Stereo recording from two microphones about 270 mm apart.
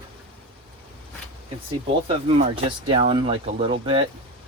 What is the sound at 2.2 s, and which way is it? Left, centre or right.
Speech, centre.